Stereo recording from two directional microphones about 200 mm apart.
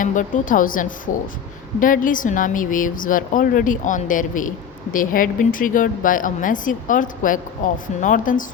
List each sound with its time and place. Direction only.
0.0 s speech: 40° left (ahead or behind)